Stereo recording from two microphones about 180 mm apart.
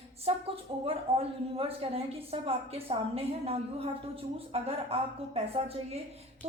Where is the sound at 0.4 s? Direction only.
35° right (ahead or behind).